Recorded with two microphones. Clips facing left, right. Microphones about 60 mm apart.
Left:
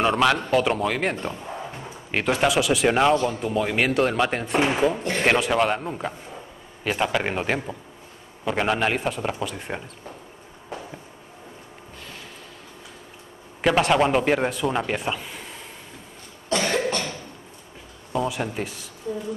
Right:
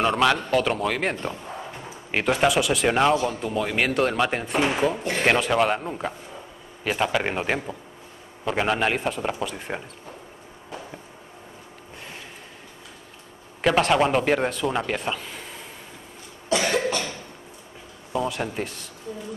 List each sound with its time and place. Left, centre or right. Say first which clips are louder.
0.0 s a man's voice: left 1 dB; centre
1.2 s bow-wow: left 1 dB; centre
2.0 s a man's voice: right 1 dB; centre
13.6 s a man's voice: even; centre
16.4 s cough: even; centre
18.1 s a man's voice: left 1 dB; centre